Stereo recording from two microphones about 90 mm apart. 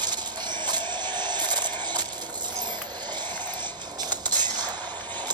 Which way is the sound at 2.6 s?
55° right (ahead or behind).